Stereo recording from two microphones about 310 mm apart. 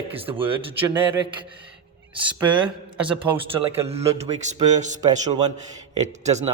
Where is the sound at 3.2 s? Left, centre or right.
Centre.